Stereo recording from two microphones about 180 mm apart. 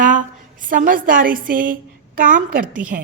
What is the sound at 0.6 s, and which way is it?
A woman's voice, 50° right (ahead or behind).